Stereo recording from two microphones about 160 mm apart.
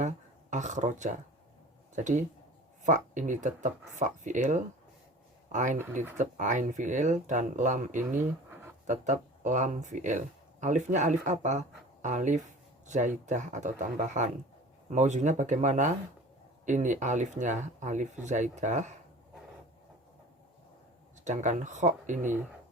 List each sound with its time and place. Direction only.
0.5 s speech: 50° right (ahead or behind)
8.2 s a sound: 15° right (ahead or behind)
8.9 s speech: 50° right (ahead or behind)
21.2 s speech: 50° right (ahead or behind)